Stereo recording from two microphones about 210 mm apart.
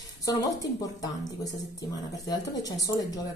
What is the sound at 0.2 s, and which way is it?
A woman's voice, 15° left (ahead or behind).